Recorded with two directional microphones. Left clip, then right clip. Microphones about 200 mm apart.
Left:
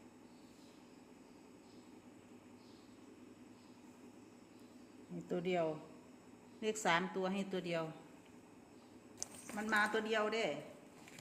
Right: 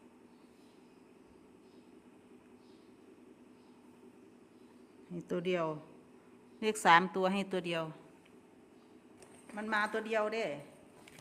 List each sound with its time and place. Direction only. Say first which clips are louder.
5.3 s a woman's voice: right 3 dB; 45° right (ahead or behind)
9.6 s a woman's voice: right 1 dB; 25° right (ahead or behind)